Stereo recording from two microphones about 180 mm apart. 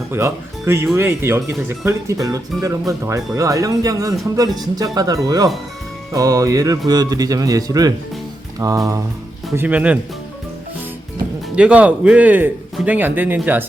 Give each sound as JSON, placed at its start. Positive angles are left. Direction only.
{"t": 0.1, "sound": "speech", "side_deg": -15}
{"t": 9.6, "sound": "speech", "side_deg": -10}
{"t": 11.5, "sound": "speech", "side_deg": -5}